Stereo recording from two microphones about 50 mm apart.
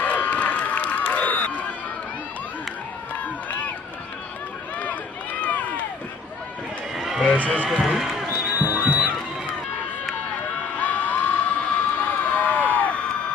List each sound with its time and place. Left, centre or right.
0.0 s crowd: left
4.7 s run: left
7.0 s a sound: centre
7.2 s speech: left
7.8 s a man's voice: centre
8.3 s music: right
10.8 s crowd: left